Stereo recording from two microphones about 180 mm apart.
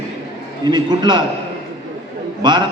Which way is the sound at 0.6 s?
25° right (ahead or behind).